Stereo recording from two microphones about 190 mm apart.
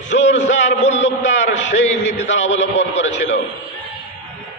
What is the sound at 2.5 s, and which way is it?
Speech, 75° left (ahead or behind).